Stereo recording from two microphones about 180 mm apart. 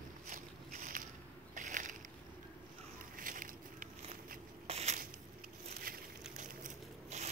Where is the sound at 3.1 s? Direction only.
50° right (ahead or behind).